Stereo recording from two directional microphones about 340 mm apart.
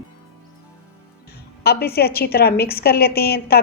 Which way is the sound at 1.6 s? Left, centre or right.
Left.